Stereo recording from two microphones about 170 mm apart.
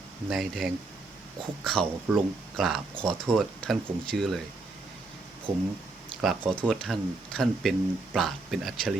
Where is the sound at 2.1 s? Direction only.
5° right (ahead or behind).